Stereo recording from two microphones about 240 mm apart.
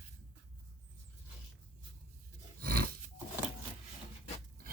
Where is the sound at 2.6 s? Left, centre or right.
Right.